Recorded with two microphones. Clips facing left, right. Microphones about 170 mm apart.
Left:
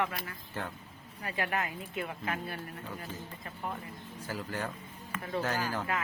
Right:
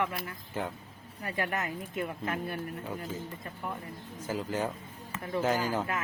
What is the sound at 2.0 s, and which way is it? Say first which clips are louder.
Speech: right 2 dB; 45° right (ahead or behind).